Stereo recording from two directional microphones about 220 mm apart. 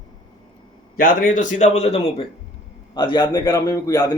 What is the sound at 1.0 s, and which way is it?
A man's voice, 40° left (ahead or behind).